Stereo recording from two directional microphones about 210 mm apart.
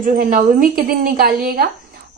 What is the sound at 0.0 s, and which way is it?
Speech, 40° right (ahead or behind).